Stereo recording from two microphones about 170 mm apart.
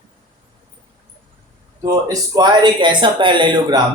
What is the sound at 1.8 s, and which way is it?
Speech, 20° right (ahead or behind).